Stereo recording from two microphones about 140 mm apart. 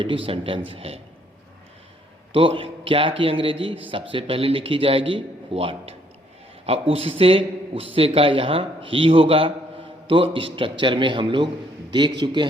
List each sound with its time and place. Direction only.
0.0 s a man's voice: 40° right (ahead or behind)
2.3 s a man's voice: 40° right (ahead or behind)